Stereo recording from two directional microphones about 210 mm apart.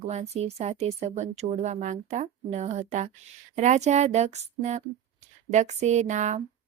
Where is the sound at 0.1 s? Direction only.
30° right (ahead or behind).